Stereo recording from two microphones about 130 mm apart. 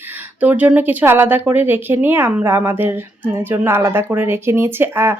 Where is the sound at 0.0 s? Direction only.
15° right (ahead or behind).